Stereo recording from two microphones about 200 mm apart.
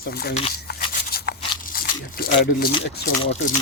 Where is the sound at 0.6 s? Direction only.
50° left (ahead or behind).